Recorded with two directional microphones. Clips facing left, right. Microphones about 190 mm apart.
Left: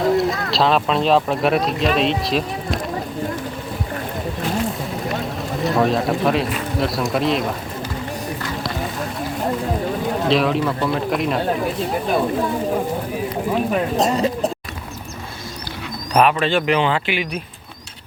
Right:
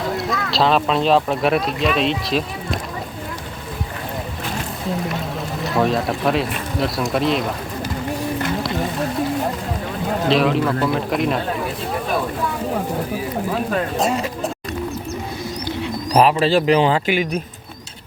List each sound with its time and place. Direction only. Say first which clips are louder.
0.0 s a sound: left 6 dB; centre (ahead or behind)
0.5 s speech: right 2 dB; centre (ahead or behind)
5.6 s speech: left 1 dB; centre (ahead or behind)
10.2 s speech: right 2 dB; centre (ahead or behind)
13.9 s a sound: left 2 dB; 40° left (ahead or behind)
16.1 s speech: right 2 dB; 35° right (ahead or behind)